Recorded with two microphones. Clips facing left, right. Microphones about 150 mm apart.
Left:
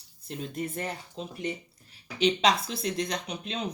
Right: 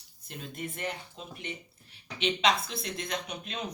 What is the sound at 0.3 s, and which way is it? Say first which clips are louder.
Speech: left 5 dB; 35° left (ahead or behind).